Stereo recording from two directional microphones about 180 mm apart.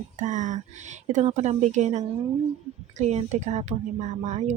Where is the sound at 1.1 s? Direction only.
40° right (ahead or behind).